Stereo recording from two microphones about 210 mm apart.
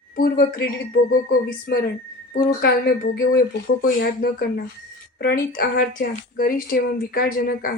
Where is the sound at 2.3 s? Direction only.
50° left (ahead or behind).